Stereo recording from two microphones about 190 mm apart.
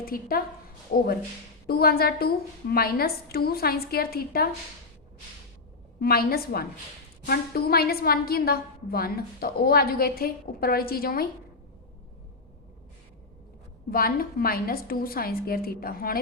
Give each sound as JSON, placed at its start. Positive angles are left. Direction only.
{"t": 0.0, "sound": "a woman's voice", "side_deg": 50}
{"t": 6.0, "sound": "a woman's voice", "side_deg": 55}
{"t": 13.9, "sound": "a woman's voice", "side_deg": 50}